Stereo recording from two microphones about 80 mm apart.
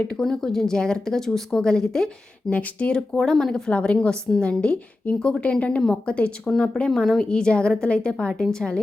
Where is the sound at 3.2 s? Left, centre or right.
Centre.